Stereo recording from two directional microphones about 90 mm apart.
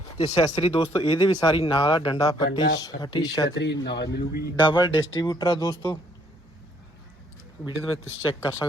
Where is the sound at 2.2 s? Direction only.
50° left (ahead or behind).